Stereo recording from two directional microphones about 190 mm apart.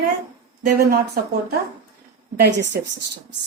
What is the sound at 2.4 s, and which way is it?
Speech, 65° right (ahead or behind).